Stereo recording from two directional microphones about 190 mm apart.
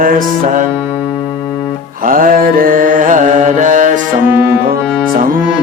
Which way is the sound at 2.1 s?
45° right (ahead or behind).